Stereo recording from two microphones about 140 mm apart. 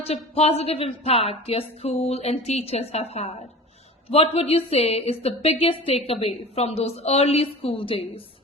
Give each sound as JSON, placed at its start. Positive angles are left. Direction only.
{"t": 0.0, "sound": "a woman's voice", "side_deg": 45}